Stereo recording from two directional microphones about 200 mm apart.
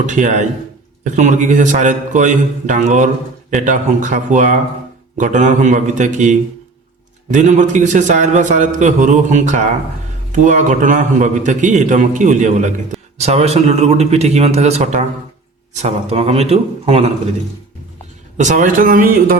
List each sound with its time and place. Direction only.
0.0 s a man's voice: 35° right (ahead or behind)
18.3 s speech: 40° right (ahead or behind)